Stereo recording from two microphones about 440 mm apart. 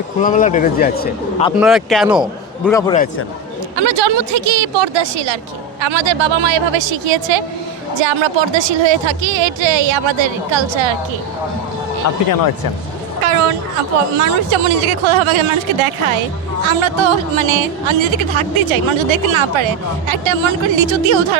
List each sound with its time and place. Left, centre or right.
0.2 s a man's voice: centre
1.5 s a man's voice: centre
3.8 s a woman's voice: right
12.1 s speech: left
14.2 s speech: right